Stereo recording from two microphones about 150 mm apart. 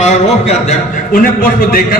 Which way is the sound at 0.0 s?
50° left (ahead or behind).